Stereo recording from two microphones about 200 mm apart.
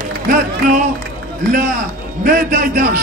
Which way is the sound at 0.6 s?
40° right (ahead or behind).